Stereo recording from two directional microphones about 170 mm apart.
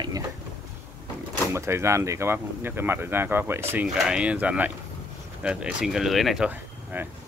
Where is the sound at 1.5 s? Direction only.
15° right (ahead or behind).